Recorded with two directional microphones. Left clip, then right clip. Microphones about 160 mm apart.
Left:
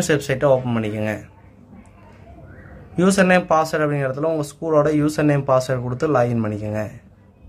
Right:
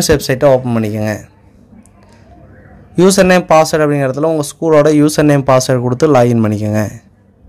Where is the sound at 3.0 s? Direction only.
35° right (ahead or behind).